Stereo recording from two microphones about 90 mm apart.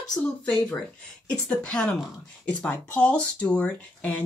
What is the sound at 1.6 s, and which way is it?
Speech, 10° left (ahead or behind).